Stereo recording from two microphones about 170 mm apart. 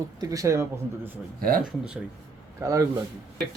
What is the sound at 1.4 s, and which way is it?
Speech, 60° right (ahead or behind).